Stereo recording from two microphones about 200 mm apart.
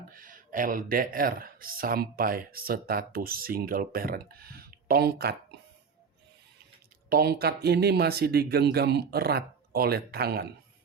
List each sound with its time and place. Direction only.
0.1 s speech: 45° right (ahead or behind)
7.1 s speech: 50° right (ahead or behind)